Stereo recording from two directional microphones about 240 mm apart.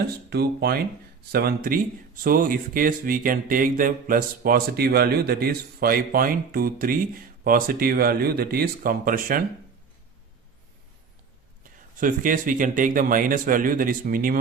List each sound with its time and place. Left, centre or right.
0.3 s speech: right
11.6 s speech: right